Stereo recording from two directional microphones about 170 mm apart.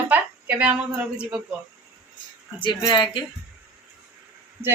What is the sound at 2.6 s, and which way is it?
Speech, 25° left (ahead or behind).